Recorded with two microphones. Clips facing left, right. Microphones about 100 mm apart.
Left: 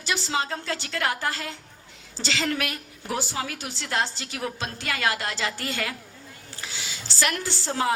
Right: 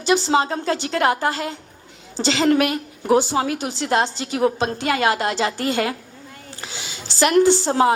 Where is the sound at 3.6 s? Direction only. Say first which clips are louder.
Right 8 dB; 20° right (ahead or behind); by 6.0 s 35° right (ahead or behind).